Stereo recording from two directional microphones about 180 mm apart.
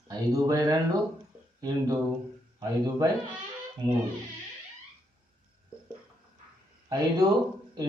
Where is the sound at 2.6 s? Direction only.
20° right (ahead or behind).